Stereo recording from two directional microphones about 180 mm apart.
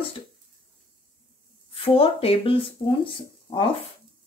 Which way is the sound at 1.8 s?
30° left (ahead or behind).